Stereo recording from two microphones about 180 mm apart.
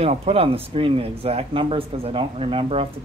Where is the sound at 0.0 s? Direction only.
35° right (ahead or behind).